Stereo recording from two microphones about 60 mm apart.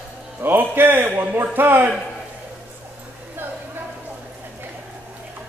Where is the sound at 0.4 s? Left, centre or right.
Right.